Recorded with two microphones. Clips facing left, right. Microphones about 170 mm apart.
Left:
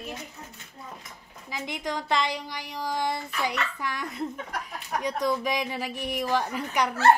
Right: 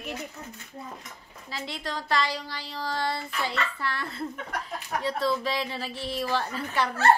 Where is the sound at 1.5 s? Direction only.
15° left (ahead or behind).